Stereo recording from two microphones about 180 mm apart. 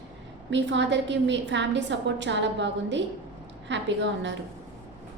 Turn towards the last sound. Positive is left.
turn(degrees=-80)